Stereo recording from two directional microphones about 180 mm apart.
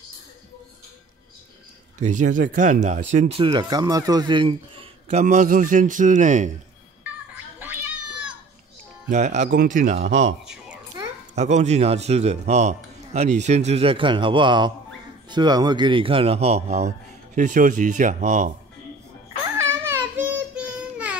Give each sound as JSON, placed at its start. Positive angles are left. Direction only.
{"t": 2.0, "sound": "a man's voice", "side_deg": -45}
{"t": 3.4, "sound": "speech", "side_deg": -25}
{"t": 5.2, "sound": "speech", "side_deg": -45}
{"t": 7.5, "sound": "cat", "side_deg": -10}
{"t": 9.1, "sound": "a man's voice", "side_deg": -40}
{"t": 10.4, "sound": "a sound", "side_deg": -5}
{"t": 11.3, "sound": "a man's voice", "side_deg": -40}
{"t": 19.4, "sound": "child singing", "side_deg": -15}